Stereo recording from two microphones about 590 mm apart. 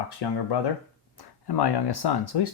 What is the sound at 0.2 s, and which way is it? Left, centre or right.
Speech, left.